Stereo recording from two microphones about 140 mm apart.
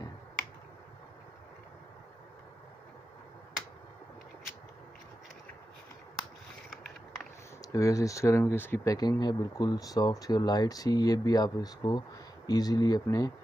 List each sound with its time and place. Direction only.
7.6 s speech: 25° left (ahead or behind)
8.9 s speech: 30° left (ahead or behind)